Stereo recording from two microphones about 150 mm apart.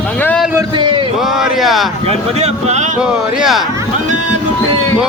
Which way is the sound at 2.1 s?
45° right (ahead or behind).